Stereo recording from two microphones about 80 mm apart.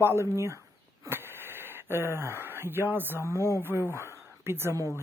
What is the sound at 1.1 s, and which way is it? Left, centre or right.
Radio, right.